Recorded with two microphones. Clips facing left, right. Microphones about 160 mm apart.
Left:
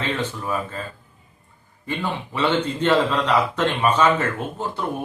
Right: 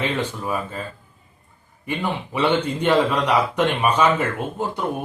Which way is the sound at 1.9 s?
15° right (ahead or behind).